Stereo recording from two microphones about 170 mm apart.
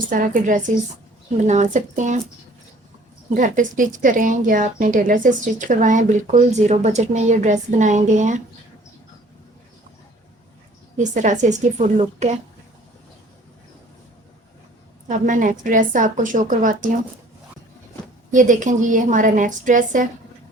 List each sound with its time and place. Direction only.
0.1 s speech: 50° right (ahead or behind)
3.3 s speech: 50° right (ahead or behind)
10.9 s speech: 45° right (ahead or behind)
15.0 s speech: 50° right (ahead or behind)
18.3 s speech: 50° right (ahead or behind)